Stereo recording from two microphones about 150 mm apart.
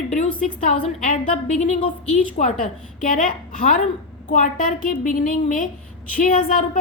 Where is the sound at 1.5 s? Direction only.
50° left (ahead or behind).